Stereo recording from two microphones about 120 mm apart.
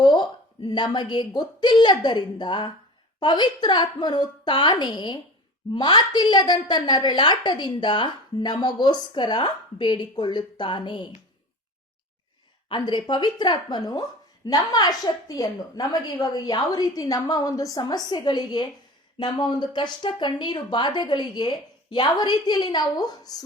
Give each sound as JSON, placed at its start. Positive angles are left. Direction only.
{"t": 0.0, "sound": "a woman's voice", "side_deg": 35}
{"t": 12.6, "sound": "a woman's voice", "side_deg": 40}